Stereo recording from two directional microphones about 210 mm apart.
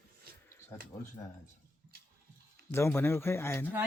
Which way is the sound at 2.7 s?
10° left (ahead or behind).